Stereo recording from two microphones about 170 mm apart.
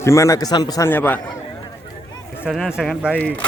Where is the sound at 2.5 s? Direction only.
5° right (ahead or behind).